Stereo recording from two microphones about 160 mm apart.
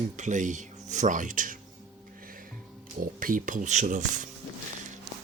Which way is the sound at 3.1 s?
60° right (ahead or behind).